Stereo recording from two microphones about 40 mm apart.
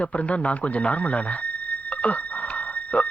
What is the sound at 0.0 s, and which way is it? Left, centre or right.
Speech, left.